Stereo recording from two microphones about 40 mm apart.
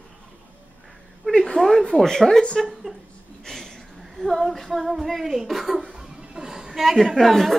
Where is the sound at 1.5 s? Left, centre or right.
Centre.